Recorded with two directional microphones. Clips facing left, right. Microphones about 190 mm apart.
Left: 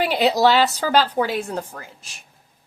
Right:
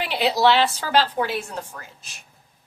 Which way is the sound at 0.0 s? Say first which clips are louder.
Left 3 dB; 40° left (ahead or behind).